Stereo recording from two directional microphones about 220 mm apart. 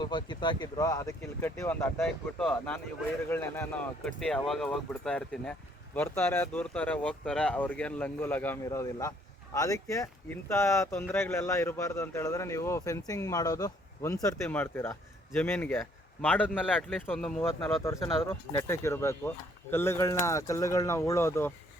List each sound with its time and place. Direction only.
0.0 s speech: 20° left (ahead or behind)